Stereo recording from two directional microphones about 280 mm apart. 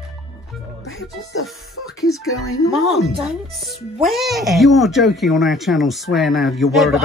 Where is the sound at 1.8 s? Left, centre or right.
Left.